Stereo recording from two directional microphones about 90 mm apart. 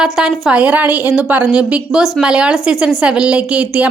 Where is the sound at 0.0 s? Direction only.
10° right (ahead or behind).